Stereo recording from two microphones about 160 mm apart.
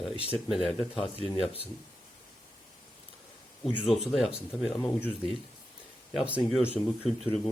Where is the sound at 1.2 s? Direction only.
35° left (ahead or behind).